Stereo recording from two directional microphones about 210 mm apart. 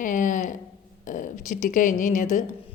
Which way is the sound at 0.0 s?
40° left (ahead or behind).